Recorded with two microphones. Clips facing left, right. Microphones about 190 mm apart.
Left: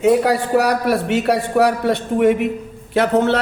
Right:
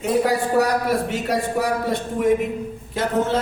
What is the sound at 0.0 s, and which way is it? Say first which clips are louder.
A man's voice: left 5 dB; 70° left (ahead or behind).